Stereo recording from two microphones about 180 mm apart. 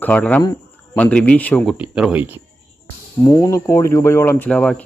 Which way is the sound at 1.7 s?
5° right (ahead or behind).